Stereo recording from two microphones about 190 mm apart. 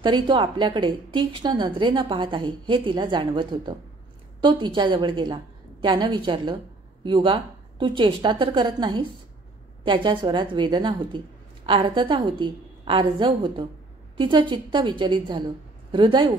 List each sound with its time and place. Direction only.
0.0 s a woman's voice: 25° right (ahead or behind)